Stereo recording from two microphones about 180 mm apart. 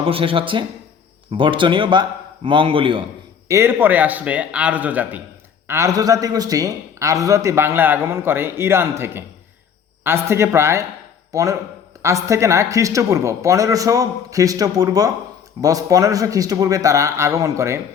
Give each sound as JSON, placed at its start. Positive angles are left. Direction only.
{"t": 0.0, "sound": "a man's voice", "side_deg": -30}
{"t": 3.5, "sound": "a man's voice", "side_deg": -15}